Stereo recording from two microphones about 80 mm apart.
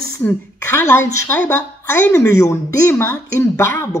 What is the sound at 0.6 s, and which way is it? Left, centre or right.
Speech, left.